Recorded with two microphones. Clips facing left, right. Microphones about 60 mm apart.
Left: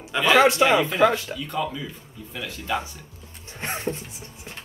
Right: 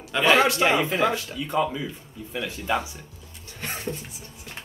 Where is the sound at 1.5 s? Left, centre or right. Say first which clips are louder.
Right 4 dB; centre.